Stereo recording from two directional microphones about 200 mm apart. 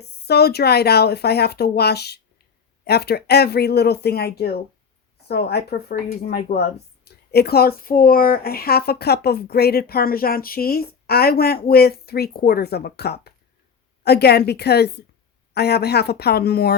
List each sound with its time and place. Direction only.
0.0 s speech: 55° left (ahead or behind)